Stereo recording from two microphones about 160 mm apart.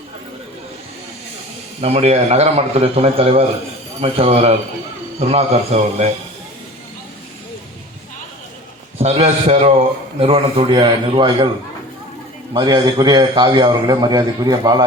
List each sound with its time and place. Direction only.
1.8 s a man's voice: 40° right (ahead or behind)
9.0 s a man's voice: 45° right (ahead or behind)
10.2 s a man's voice: 35° right (ahead or behind)
12.5 s a man's voice: 30° right (ahead or behind)